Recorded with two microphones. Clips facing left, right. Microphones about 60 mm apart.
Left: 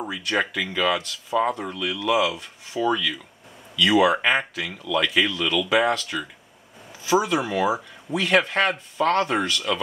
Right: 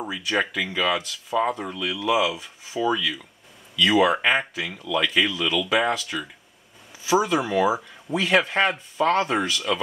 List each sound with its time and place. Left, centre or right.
0.0 s speech: centre